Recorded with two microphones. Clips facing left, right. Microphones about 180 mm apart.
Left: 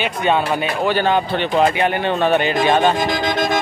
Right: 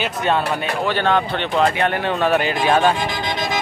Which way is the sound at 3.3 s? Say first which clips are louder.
Left 5 dB; 50° left (ahead or behind).